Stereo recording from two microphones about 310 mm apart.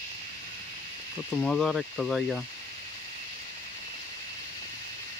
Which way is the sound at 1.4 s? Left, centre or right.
Centre.